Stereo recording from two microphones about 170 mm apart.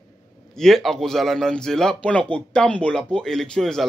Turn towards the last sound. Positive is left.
turn(degrees=0)  # may be behind; listen again after turning